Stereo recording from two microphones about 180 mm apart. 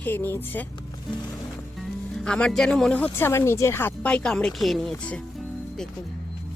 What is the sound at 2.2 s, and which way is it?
Speech, 5° left (ahead or behind).